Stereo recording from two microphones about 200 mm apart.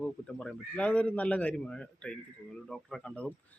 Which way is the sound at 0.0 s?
5° left (ahead or behind).